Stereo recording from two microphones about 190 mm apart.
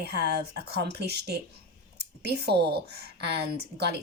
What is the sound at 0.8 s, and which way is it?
Speech, 60° right (ahead or behind).